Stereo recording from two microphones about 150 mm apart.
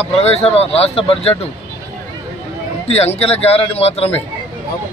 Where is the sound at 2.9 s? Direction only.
45° left (ahead or behind).